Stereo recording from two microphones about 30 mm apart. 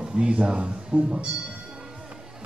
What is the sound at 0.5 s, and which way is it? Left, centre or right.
Speech, right.